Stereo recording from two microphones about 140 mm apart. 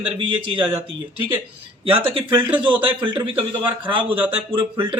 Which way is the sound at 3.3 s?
35° right (ahead or behind).